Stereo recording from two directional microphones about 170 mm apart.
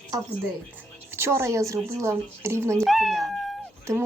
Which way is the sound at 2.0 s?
15° right (ahead or behind).